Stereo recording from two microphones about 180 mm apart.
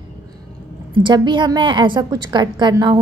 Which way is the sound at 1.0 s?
25° right (ahead or behind).